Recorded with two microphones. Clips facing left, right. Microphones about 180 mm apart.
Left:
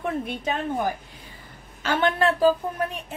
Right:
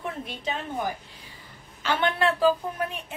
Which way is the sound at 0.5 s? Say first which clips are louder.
Left 3 dB; 50° left (ahead or behind).